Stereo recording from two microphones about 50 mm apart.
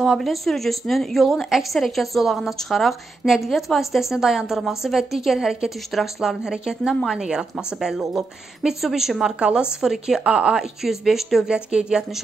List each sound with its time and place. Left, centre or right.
0.0 s a woman's voice: centre
6.4 s a woman's voice: centre
10.8 s a woman's voice: centre